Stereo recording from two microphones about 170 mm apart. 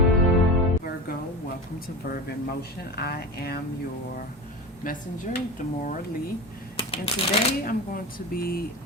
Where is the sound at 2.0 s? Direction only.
65° left (ahead or behind).